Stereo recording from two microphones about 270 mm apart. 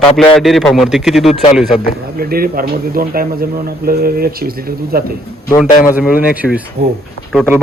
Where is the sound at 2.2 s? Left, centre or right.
Right.